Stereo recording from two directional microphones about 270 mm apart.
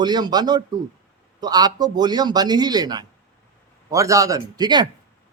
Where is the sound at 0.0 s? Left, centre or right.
Centre.